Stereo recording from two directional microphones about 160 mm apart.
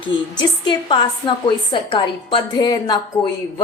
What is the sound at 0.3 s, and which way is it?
A woman's voice, 30° left (ahead or behind).